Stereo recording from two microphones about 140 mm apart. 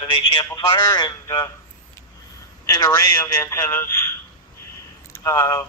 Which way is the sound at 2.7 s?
25° left (ahead or behind).